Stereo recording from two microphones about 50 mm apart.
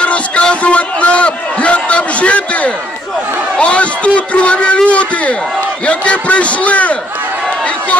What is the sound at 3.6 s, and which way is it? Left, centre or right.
A man's voice, left.